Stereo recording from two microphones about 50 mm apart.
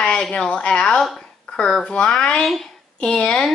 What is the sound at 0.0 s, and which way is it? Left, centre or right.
A woman's voice, centre.